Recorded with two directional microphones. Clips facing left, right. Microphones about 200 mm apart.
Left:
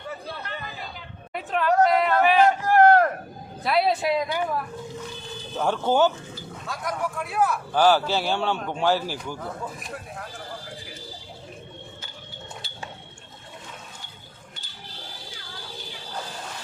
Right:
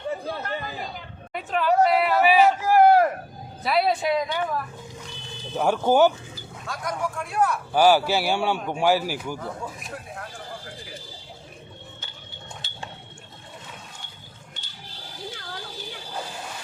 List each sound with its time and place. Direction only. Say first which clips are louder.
0.4 s chatter: right 5 dB; 45° right (ahead or behind)
1.3 s a sound: right 1 dB; centre (ahead or behind)
5.5 s a man's voice: right 3 dB; 10° right (ahead or behind)
6.7 s speech: even; centre (ahead or behind)
7.7 s a man's voice: right 2 dB; 10° right (ahead or behind)